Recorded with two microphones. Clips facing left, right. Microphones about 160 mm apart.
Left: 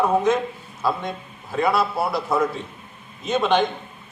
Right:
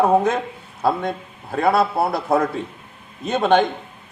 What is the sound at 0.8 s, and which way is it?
A man's voice, 55° right (ahead or behind).